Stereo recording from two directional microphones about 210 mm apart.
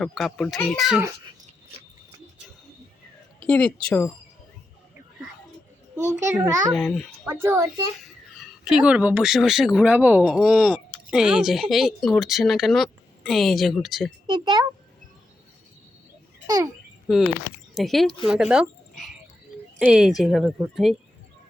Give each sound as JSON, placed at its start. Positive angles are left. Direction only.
{"t": 0.0, "sound": "speech", "side_deg": 0}
{"t": 3.4, "sound": "a woman's voice", "side_deg": 5}
{"t": 6.0, "sound": "a child's voice", "side_deg": -15}
{"t": 6.7, "sound": "speech", "side_deg": 5}
{"t": 7.3, "sound": "a child's voice", "side_deg": -10}
{"t": 14.3, "sound": "a child's voice", "side_deg": -20}
{"t": 17.1, "sound": "speech", "side_deg": 0}